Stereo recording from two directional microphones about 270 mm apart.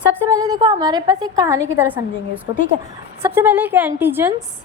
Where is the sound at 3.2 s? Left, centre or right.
Centre.